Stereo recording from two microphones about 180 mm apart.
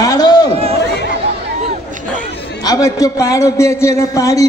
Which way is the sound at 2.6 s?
20° left (ahead or behind).